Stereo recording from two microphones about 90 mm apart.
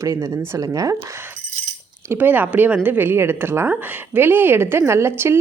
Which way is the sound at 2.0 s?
20° right (ahead or behind).